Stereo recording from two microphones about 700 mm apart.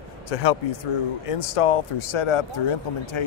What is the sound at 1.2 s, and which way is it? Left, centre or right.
Speech, left.